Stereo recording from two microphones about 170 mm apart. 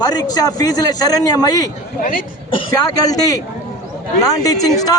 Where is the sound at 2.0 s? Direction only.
55° left (ahead or behind).